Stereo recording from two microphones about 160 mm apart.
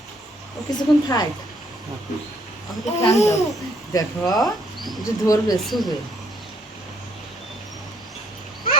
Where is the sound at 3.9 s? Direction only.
20° left (ahead or behind).